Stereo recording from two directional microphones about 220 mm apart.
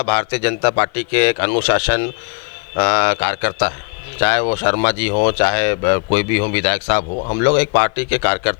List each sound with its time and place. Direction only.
0.0 s speech: 15° left (ahead or behind)
7.2 s speech: 30° left (ahead or behind)
7.4 s speech: 15° left (ahead or behind)